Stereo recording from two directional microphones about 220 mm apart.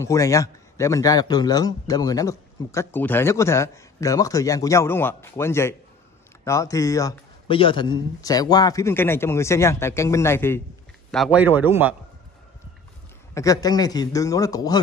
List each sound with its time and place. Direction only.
0.0 s a man's voice: 15° left (ahead or behind)
11.1 s a man's voice: 5° right (ahead or behind)
13.3 s a man's voice: 15° left (ahead or behind)